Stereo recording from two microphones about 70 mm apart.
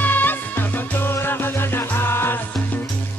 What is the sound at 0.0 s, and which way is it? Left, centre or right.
Music, left.